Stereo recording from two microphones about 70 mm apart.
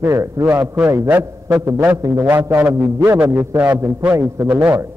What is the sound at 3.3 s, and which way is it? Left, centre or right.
Speech, right.